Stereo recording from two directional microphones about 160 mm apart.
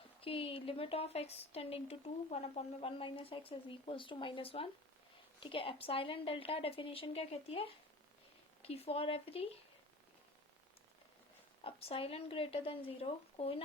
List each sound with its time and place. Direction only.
0.2 s a woman's voice: 35° left (ahead or behind)
11.6 s a woman's voice: 35° left (ahead or behind)